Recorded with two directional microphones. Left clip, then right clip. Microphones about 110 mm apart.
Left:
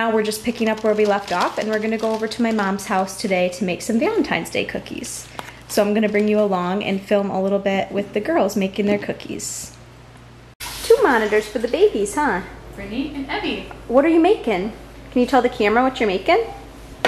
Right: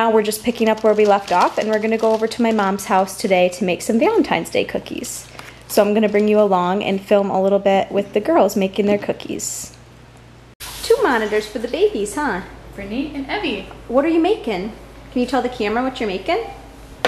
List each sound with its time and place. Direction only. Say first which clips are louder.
0.0 s a woman's voice: right 4 dB; 20° right (ahead or behind)
10.9 s a woman's voice: left 1 dB; 15° left (ahead or behind)
12.2 s a woman's voice: left 2 dB; centre (ahead or behind)
12.9 s a woman's voice: right 2 dB; 25° right (ahead or behind)
13.9 s a woman's voice: left 1 dB; 10° left (ahead or behind)